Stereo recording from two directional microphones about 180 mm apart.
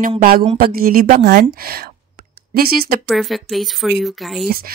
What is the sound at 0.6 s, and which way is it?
A woman's voice, 55° right (ahead or behind).